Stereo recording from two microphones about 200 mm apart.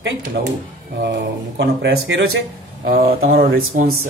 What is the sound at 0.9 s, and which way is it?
Speech, 60° right (ahead or behind).